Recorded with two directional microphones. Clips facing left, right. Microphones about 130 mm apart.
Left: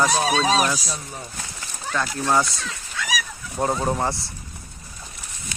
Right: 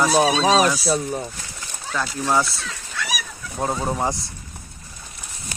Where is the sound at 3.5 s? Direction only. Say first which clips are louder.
Left 1 dB; centre (ahead or behind).